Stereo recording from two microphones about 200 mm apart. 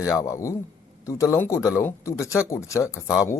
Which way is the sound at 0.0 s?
15° left (ahead or behind).